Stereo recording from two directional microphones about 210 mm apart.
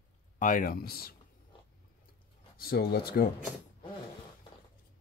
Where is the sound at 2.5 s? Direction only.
45° left (ahead or behind).